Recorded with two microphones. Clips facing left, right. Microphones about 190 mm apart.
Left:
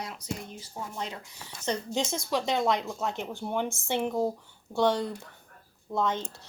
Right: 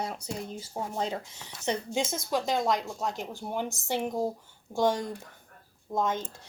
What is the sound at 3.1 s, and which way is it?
Speech, 40° right (ahead or behind).